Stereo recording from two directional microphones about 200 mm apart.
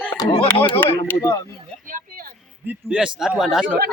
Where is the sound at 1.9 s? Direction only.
40° right (ahead or behind).